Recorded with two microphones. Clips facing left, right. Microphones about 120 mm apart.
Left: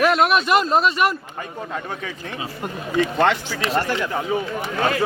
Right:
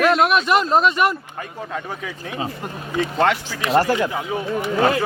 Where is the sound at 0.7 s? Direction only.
20° right (ahead or behind).